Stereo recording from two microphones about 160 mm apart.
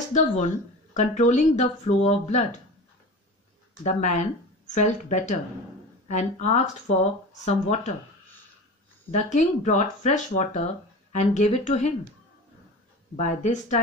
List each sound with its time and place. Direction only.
0.1 s speech: 45° left (ahead or behind)
3.8 s speech: 50° left (ahead or behind)
9.1 s speech: 45° left (ahead or behind)
13.1 s speech: 45° left (ahead or behind)